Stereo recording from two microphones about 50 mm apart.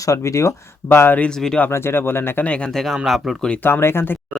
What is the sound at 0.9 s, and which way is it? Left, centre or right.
Speech, left.